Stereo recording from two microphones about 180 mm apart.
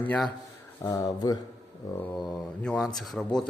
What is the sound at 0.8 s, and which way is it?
Speech, 20° left (ahead or behind).